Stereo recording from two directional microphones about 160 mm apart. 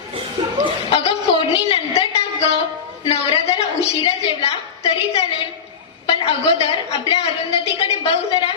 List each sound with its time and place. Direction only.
0.4 s chuckle: 25° right (ahead or behind)
0.9 s a sound: 35° left (ahead or behind)
3.0 s a woman's voice: 35° left (ahead or behind)